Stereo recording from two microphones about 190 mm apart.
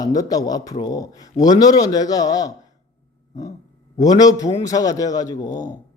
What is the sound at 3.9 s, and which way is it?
Speech, 20° left (ahead or behind).